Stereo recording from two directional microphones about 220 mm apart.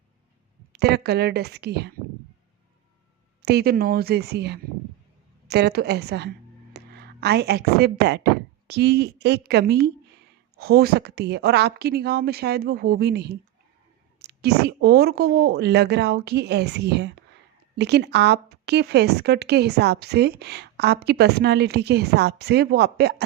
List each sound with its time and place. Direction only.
0.7 s speech: 50° right (ahead or behind)
3.4 s speech: 45° right (ahead or behind)